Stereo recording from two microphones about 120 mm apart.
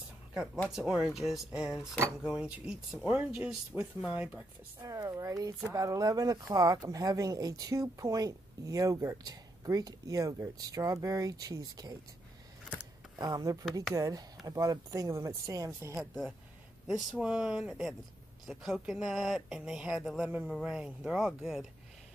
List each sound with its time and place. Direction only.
0.7 s speech: 5° right (ahead or behind)
3.7 s speech: 5° left (ahead or behind)
4.8 s speech: 30° right (ahead or behind)
13.2 s speech: 30° right (ahead or behind)
16.8 s speech: 5° right (ahead or behind)